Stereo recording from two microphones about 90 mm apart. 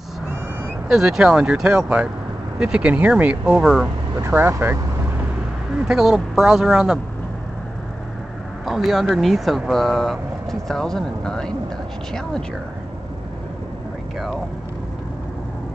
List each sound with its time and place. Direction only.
0.8 s speech: 5° right (ahead or behind)
4.3 s speech: 25° right (ahead or behind)
5.8 s speech: 10° right (ahead or behind)
8.6 s speech: centre (ahead or behind)